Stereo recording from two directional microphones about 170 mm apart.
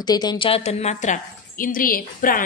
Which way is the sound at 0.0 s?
25° left (ahead or behind).